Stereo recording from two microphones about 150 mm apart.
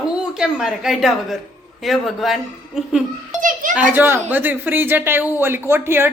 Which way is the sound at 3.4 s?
60° right (ahead or behind).